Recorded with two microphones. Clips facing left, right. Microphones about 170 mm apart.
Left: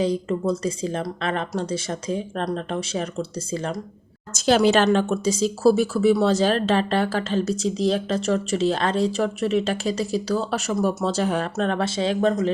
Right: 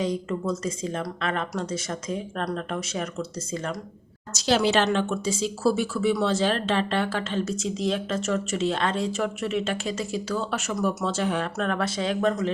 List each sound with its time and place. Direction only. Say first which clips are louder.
0.0 s speech: left 4 dB; 35° left (ahead or behind)
4.3 s speech: left 5 dB; 50° left (ahead or behind)
11.5 s speech: left 3 dB; 30° left (ahead or behind)